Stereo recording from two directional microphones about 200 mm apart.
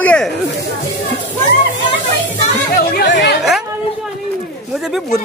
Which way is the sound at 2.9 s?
55° left (ahead or behind).